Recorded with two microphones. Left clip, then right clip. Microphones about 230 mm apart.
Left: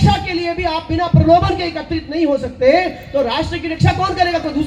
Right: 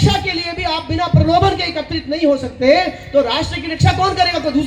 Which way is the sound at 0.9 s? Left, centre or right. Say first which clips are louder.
Left 3 dB; right.